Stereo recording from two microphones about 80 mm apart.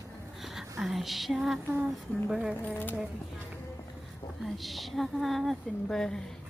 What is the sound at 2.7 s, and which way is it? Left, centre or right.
Speech, left.